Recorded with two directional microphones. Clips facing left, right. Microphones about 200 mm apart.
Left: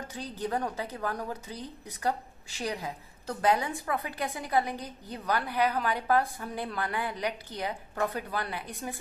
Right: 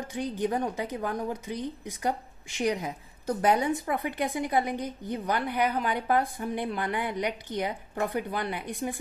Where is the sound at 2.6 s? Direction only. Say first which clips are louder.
Right 6 dB; 20° right (ahead or behind).